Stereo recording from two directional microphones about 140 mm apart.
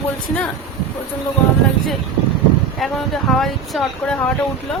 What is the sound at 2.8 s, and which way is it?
Speech, centre (ahead or behind).